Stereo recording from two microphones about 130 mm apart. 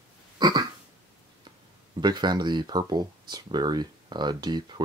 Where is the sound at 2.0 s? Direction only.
35° right (ahead or behind).